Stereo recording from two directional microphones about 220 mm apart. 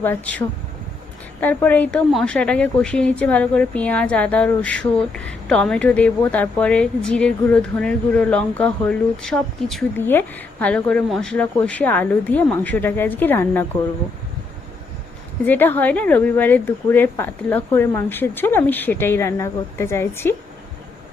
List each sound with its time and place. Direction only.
0.0 s a woman's voice: 10° left (ahead or behind)
15.4 s a woman's voice: 10° left (ahead or behind)